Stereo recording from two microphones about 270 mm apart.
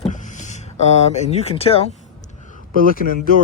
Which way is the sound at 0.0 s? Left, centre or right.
Left.